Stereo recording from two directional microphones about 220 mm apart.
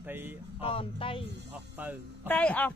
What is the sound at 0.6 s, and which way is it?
Speech, 25° left (ahead or behind).